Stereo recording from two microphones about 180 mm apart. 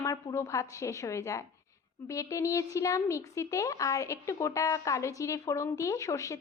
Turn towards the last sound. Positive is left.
turn(degrees=15)  # may be behind; listen again after turning